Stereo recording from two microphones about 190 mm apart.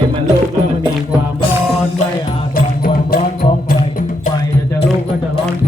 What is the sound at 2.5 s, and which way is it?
Music, 50° left (ahead or behind).